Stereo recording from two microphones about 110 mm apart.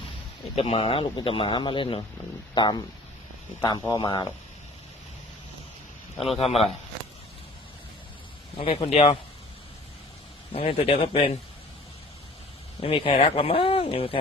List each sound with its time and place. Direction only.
0.5 s speech: 60° left (ahead or behind); by 4.3 s 45° left (ahead or behind)
6.2 s speech: 60° left (ahead or behind)
8.5 s speech: 60° left (ahead or behind); by 9.1 s 85° left
10.5 s speech: 55° left (ahead or behind)
12.8 s speech: 50° left (ahead or behind)
13.1 s speech: 60° left (ahead or behind)